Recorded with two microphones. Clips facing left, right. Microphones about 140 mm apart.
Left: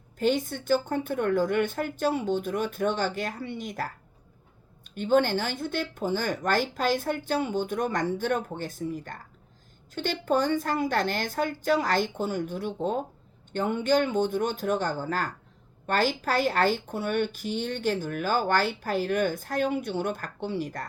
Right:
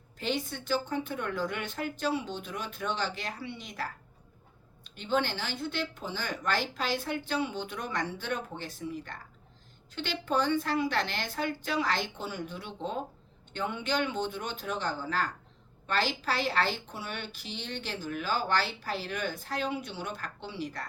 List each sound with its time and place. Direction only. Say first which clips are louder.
0.2 s a woman's voice: left 8 dB; 45° left (ahead or behind)